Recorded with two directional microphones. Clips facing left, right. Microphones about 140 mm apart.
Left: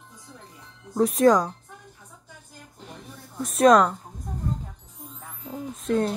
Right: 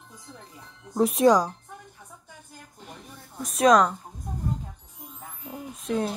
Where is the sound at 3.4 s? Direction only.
Centre (ahead or behind).